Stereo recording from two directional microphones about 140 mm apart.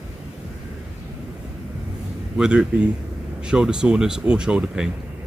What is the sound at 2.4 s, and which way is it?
Speech, 5° right (ahead or behind).